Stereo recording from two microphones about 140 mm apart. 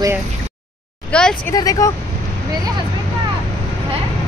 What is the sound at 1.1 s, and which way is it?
Speech, 5° left (ahead or behind).